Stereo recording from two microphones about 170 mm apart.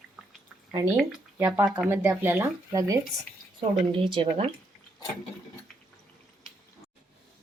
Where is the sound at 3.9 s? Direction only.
35° right (ahead or behind).